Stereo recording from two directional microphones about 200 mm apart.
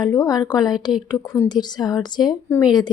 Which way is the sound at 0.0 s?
20° left (ahead or behind).